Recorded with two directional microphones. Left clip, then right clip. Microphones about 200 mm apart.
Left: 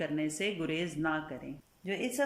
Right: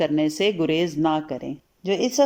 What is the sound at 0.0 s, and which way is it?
Speech, 30° right (ahead or behind).